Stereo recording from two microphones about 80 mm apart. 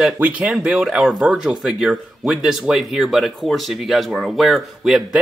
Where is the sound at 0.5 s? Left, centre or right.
Centre.